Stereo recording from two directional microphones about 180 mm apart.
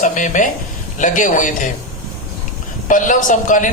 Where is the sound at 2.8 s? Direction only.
45° left (ahead or behind).